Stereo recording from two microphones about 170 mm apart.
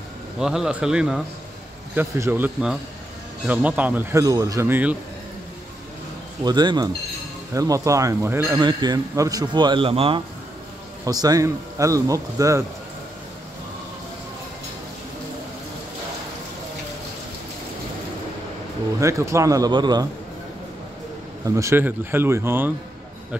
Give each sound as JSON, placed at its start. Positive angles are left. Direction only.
{"t": 0.4, "sound": "a man's voice", "side_deg": -5}
{"t": 2.0, "sound": "a man's voice", "side_deg": -15}
{"t": 6.4, "sound": "a man's voice", "side_deg": -25}
{"t": 8.5, "sound": "speech", "side_deg": -25}
{"t": 11.1, "sound": "speech", "side_deg": -20}
{"t": 18.9, "sound": "speech", "side_deg": -15}
{"t": 21.5, "sound": "a man's voice", "side_deg": -15}